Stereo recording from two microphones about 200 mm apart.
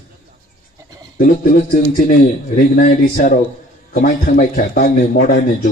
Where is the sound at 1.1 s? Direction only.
45° left (ahead or behind).